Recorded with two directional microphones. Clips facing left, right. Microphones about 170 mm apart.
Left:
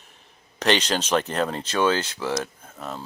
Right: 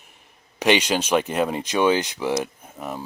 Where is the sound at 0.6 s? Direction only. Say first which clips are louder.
Right 3 dB; 10° right (ahead or behind).